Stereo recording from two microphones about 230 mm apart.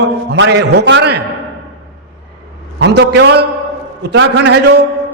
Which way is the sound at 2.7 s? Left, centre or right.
Right.